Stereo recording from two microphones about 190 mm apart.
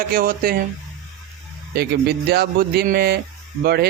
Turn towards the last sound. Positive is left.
turn(degrees=-55)  # may be behind; listen again after turning